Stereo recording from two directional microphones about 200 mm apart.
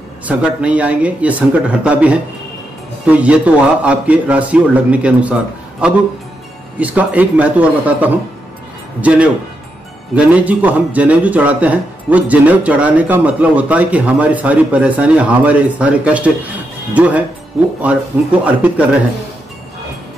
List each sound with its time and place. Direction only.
0.3 s a man's voice: 5° right (ahead or behind)